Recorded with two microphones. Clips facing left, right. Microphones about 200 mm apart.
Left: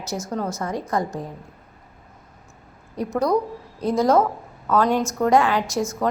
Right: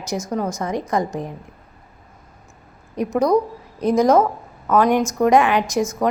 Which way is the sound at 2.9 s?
20° right (ahead or behind).